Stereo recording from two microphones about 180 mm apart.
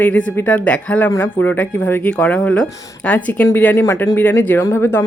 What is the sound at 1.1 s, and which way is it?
Speech, 20° left (ahead or behind).